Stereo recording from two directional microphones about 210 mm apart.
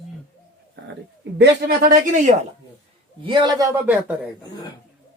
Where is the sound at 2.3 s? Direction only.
35° right (ahead or behind).